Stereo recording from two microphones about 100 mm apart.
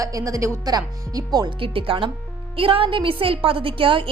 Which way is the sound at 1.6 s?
65° right (ahead or behind).